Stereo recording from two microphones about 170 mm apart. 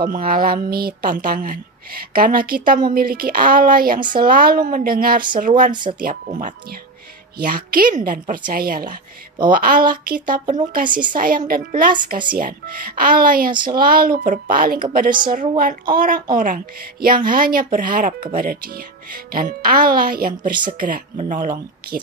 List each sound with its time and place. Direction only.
0.0 s speech: 55° right (ahead or behind)